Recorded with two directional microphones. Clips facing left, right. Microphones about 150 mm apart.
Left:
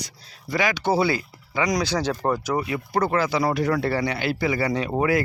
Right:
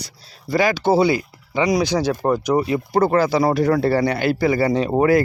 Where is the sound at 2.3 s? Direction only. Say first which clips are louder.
Right 8 dB; 20° right (ahead or behind).